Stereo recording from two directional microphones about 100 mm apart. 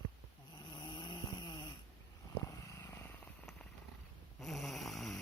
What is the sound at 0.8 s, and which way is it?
Vehicle, 50° left (ahead or behind).